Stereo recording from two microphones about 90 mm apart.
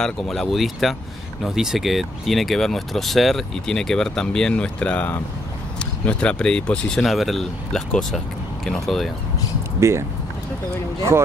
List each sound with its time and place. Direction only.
0.0 s speech: 5° left (ahead or behind)
9.8 s speech: 30° right (ahead or behind)